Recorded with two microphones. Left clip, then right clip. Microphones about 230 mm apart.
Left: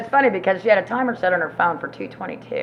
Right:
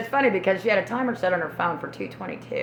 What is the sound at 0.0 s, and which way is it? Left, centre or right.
A woman's voice, right.